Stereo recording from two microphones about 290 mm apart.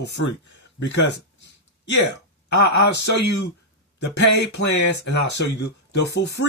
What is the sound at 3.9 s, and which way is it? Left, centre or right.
A man's voice, left.